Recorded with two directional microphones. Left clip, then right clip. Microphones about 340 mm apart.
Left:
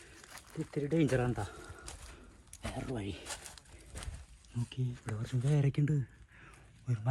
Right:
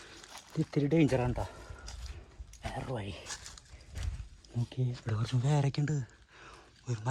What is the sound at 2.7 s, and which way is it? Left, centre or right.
Speech, centre.